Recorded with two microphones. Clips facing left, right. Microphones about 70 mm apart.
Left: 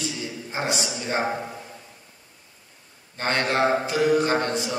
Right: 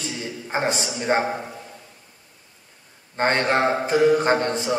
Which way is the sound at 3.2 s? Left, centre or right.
Right.